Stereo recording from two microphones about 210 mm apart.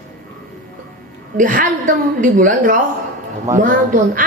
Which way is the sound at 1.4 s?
40° right (ahead or behind).